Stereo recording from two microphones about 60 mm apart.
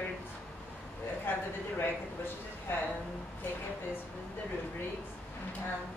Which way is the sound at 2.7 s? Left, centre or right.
Left.